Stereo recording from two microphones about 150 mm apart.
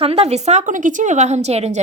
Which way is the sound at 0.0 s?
45° right (ahead or behind).